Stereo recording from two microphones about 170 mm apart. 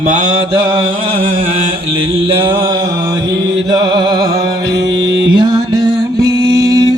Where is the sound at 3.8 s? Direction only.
25° right (ahead or behind).